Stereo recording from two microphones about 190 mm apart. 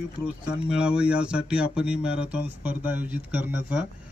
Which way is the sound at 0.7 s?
5° right (ahead or behind).